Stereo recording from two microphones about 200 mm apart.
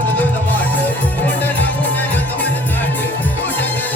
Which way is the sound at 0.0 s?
10° left (ahead or behind).